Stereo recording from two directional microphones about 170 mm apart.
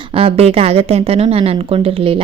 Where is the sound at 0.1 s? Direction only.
35° right (ahead or behind).